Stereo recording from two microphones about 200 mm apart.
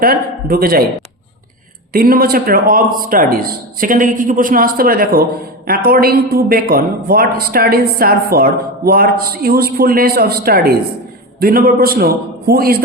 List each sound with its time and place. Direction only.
0.0 s a man's voice: 45° right (ahead or behind)
1.9 s a man's voice: 50° right (ahead or behind)